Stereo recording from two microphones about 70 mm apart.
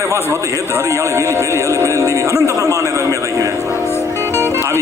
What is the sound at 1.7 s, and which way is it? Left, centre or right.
A man's voice, right.